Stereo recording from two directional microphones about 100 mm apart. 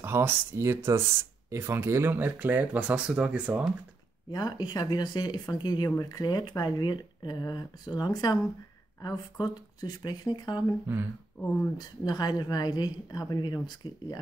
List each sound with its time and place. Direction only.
0.0 s speech: 25° right (ahead or behind)
4.3 s speech: 40° left (ahead or behind)
11.8 s speech: 40° left (ahead or behind)